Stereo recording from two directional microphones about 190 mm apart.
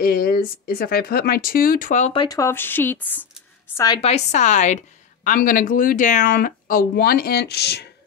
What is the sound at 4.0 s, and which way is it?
Speech, 35° left (ahead or behind).